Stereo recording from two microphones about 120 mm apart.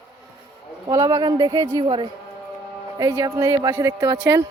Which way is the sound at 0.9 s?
35° right (ahead or behind).